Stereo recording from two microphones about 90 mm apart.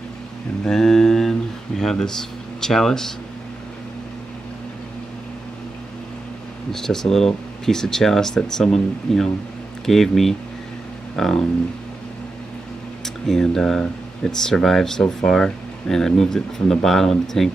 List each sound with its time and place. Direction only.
0.7 s mantra: 5° left (ahead or behind)
1.8 s speech: 5° left (ahead or behind)
6.7 s speech: 5° left (ahead or behind)
13.0 s speech: 5° left (ahead or behind)